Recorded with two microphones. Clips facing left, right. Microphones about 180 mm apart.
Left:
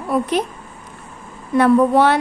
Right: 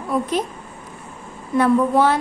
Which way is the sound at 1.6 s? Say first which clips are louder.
Left 3 dB; 70° left (ahead or behind).